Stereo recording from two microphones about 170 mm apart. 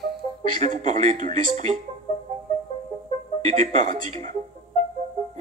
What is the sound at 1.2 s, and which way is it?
Speech, 45° right (ahead or behind).